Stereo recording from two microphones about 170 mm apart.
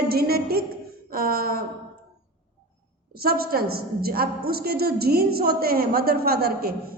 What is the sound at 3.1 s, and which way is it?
A woman's voice, 60° right (ahead or behind).